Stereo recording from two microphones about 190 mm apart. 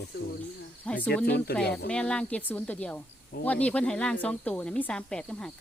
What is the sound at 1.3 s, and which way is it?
Speech, 60° left (ahead or behind).